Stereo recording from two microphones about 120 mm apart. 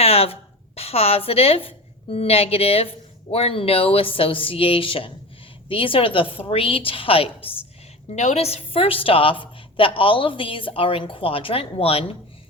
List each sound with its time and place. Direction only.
0.0 s a woman's voice: 55° left (ahead or behind)
8.1 s a woman's voice: 65° left (ahead or behind)